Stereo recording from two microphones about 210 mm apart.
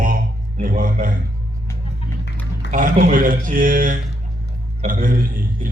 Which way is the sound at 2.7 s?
40° right (ahead or behind).